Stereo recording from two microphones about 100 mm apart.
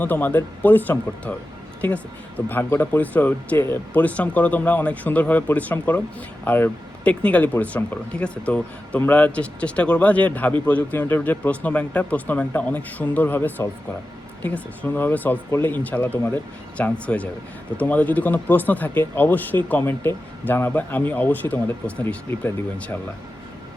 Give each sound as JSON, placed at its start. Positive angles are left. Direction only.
{"t": 0.0, "sound": "speech", "side_deg": 15}